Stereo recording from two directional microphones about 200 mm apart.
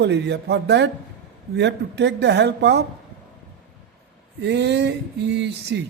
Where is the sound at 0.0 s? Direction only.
60° right (ahead or behind).